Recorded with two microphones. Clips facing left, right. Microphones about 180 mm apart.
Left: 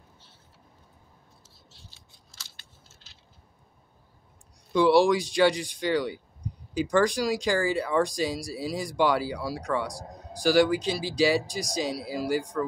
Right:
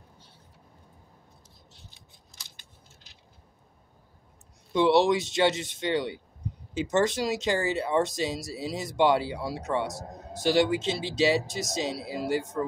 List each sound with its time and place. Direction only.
1.7 s scissors: 20° right (ahead or behind)
4.7 s speech: 25° right (ahead or behind)